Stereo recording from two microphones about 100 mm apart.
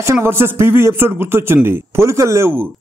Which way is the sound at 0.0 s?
25° right (ahead or behind).